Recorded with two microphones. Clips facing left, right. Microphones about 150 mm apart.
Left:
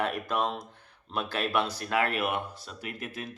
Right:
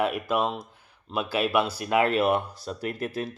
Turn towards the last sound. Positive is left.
turn(degrees=-35)  # may be behind; listen again after turning